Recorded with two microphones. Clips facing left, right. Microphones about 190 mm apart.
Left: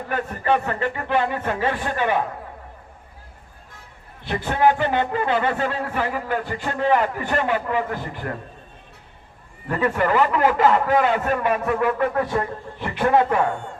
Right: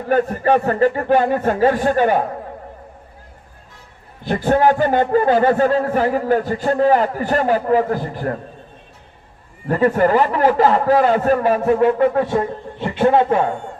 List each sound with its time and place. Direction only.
0.1 s a man's voice: 40° right (ahead or behind)
4.3 s a man's voice: 40° right (ahead or behind)
9.6 s a man's voice: 40° right (ahead or behind)